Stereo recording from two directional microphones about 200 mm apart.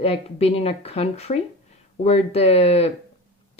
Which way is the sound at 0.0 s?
30° left (ahead or behind).